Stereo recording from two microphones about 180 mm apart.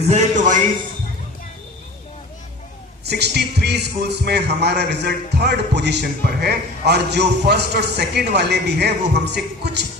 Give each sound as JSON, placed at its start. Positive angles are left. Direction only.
{"t": 0.0, "sound": "a man's voice", "side_deg": -40}
{"t": 3.0, "sound": "speech", "side_deg": -65}